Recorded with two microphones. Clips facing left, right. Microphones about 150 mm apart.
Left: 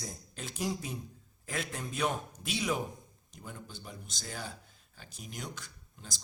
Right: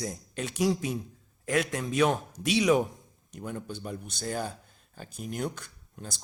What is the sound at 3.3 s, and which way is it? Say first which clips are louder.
A man's voice: right 10 dB; 65° right (ahead or behind).